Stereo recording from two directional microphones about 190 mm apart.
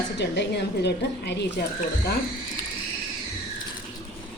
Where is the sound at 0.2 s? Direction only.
65° left (ahead or behind).